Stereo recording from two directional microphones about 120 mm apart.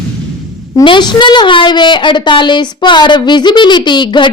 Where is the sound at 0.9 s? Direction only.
40° left (ahead or behind).